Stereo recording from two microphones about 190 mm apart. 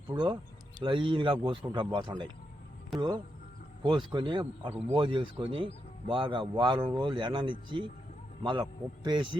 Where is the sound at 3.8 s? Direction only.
25° right (ahead or behind).